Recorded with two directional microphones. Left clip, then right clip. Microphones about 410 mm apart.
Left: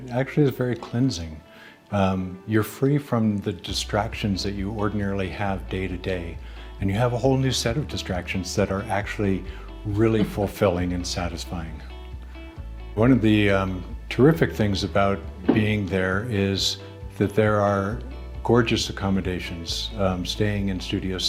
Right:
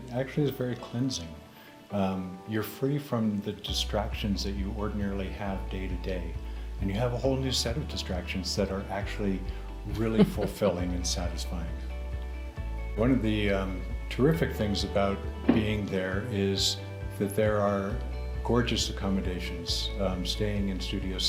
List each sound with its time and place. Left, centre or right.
0.1 s speech: left
13.0 s speech: left